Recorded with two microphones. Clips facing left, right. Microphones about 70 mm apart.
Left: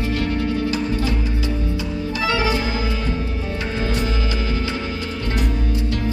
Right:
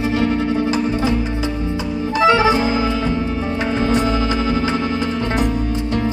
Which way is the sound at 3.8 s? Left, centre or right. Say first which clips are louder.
Right 6 dB; right.